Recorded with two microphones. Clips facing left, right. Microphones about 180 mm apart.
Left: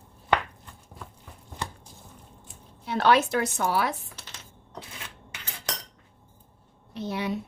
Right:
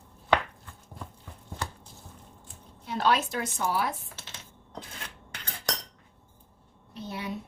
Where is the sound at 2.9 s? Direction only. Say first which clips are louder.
Left 5 dB; 70° left (ahead or behind).